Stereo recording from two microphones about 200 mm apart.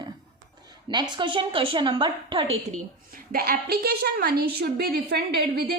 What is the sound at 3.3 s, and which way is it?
A woman's voice, 50° right (ahead or behind).